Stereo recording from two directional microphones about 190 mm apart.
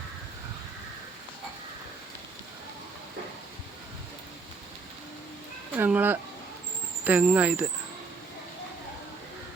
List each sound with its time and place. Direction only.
5.7 s speech: 10° right (ahead or behind)